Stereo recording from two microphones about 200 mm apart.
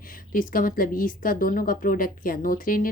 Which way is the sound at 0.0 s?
45° left (ahead or behind).